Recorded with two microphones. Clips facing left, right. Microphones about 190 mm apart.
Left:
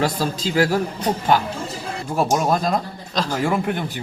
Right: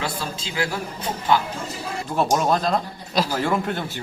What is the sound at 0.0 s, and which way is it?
A woman's voice, 40° left (ahead or behind).